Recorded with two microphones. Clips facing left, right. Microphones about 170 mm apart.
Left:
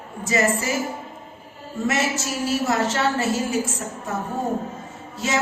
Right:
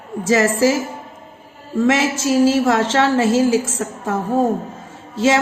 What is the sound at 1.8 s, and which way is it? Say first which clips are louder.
A woman's voice: right 7 dB; 90° right.